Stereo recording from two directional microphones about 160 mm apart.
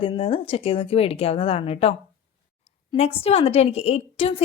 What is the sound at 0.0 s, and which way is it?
A woman's voice, 35° left (ahead or behind).